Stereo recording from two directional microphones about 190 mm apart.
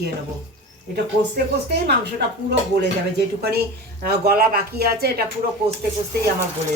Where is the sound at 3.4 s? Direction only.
55° right (ahead or behind).